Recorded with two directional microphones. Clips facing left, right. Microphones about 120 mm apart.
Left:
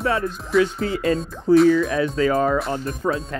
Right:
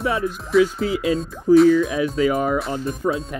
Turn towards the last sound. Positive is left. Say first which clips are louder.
# right 1 dB
turn(degrees=0)  # may be behind; listen again after turning